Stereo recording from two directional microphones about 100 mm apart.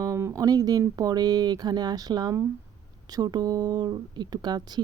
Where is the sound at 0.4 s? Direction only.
40° right (ahead or behind).